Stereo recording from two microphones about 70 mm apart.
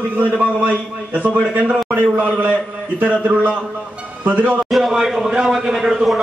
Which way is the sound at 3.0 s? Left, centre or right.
Centre.